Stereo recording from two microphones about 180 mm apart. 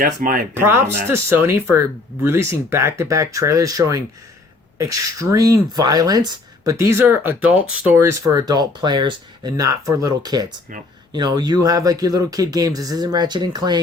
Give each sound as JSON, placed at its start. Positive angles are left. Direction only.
{"t": 0.0, "sound": "speech", "side_deg": -50}
{"t": 0.6, "sound": "speech", "side_deg": -15}